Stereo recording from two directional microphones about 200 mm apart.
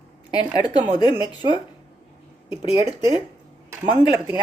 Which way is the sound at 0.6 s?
20° left (ahead or behind).